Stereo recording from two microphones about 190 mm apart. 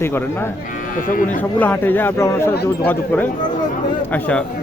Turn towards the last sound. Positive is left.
turn(degrees=5)  # may be behind; listen again after turning